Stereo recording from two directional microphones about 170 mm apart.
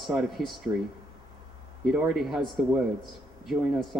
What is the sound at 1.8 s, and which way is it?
A man's voice, 5° right (ahead or behind).